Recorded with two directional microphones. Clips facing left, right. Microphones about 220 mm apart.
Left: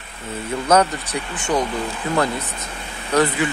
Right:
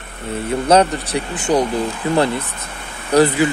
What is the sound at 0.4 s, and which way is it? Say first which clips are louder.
Speech: right 3 dB; 30° right (ahead or behind).